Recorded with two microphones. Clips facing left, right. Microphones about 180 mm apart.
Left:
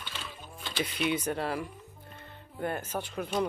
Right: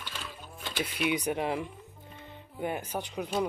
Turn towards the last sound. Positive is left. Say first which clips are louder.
# even
turn(degrees=-15)  # may be behind; listen again after turning